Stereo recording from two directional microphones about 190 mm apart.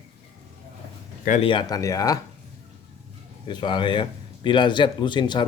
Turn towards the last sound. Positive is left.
turn(degrees=25)  # may be behind; listen again after turning